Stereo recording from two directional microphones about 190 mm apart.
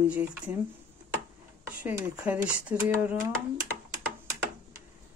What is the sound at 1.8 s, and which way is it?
Speech, 10° right (ahead or behind).